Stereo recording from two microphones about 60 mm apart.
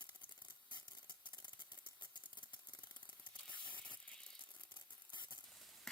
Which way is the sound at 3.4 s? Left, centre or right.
Left.